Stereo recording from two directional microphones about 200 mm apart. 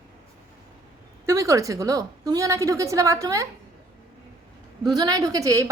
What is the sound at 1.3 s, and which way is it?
A woman's voice, 15° right (ahead or behind).